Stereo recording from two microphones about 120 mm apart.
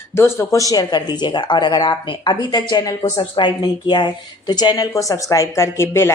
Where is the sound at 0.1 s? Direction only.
20° left (ahead or behind).